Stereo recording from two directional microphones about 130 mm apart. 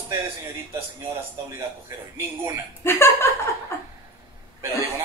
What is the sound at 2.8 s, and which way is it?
Speech, 20° left (ahead or behind).